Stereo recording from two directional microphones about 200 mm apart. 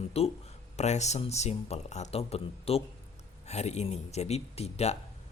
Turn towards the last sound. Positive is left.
turn(degrees=30)  # may be behind; listen again after turning